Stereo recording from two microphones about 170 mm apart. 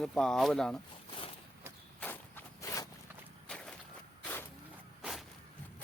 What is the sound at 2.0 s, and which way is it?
Walk, 10° left (ahead or behind).